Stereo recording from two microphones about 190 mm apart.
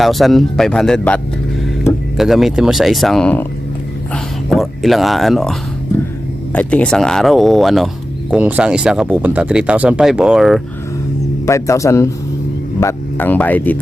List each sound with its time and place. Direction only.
0.0 s speech: centre (ahead or behind)
11.4 s speech: 15° left (ahead or behind)